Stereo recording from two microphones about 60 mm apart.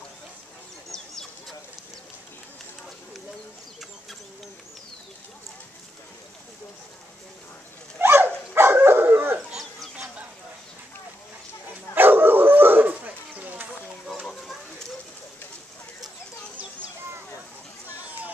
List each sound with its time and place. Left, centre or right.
8.0 s dog: right
11.7 s dog: right
14.2 s a sound: centre